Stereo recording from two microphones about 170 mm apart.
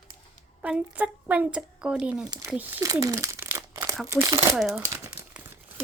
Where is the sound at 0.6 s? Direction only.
5° right (ahead or behind).